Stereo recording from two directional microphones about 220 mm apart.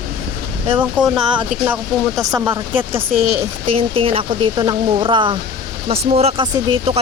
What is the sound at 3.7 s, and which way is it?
Speech, 25° right (ahead or behind).